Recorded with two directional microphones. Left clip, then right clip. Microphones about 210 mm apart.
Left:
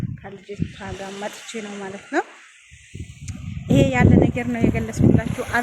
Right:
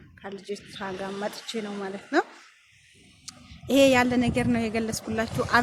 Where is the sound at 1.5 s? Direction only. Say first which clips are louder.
Left 1 dB; 40° left (ahead or behind).